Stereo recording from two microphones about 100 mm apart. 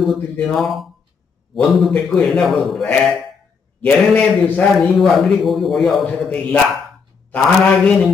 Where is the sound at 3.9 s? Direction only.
15° left (ahead or behind).